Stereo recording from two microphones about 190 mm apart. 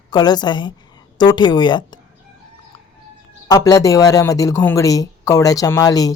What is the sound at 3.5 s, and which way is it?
Speech, 20° left (ahead or behind).